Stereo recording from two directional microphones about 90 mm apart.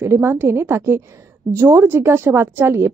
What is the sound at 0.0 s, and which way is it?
A woman's voice, 25° right (ahead or behind).